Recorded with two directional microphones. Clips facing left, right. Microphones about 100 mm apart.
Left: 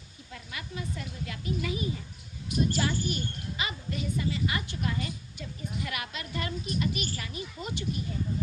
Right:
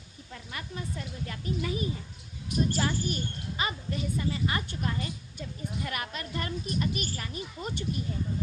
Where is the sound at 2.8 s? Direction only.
40° right (ahead or behind).